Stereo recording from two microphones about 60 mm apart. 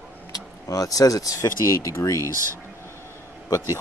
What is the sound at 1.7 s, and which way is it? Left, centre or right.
Speech, left.